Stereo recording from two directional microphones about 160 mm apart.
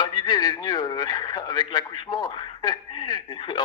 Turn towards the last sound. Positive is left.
turn(degrees=30)  # may be behind; listen again after turning